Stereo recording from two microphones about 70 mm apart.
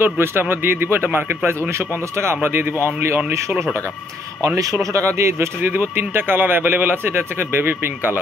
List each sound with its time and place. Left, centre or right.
0.0 s speech: right
4.9 s speech: right